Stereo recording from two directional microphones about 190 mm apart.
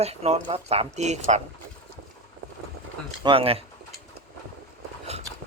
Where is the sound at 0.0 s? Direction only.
35° right (ahead or behind).